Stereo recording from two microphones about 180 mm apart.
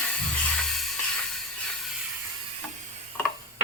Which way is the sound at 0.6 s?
Centre (ahead or behind).